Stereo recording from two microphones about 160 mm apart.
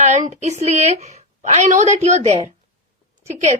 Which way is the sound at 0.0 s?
50° right (ahead or behind).